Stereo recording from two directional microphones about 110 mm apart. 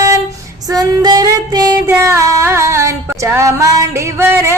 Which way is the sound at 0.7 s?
35° right (ahead or behind).